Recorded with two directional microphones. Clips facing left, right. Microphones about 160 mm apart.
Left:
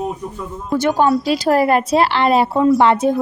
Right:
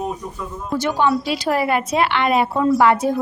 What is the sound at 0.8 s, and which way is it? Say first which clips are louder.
A woman's voice: left 4 dB; 45° left (ahead or behind).